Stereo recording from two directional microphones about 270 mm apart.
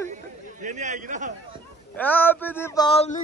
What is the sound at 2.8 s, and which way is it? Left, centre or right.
Speech, left.